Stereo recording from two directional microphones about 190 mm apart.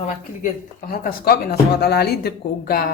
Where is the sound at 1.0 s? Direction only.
55° left (ahead or behind).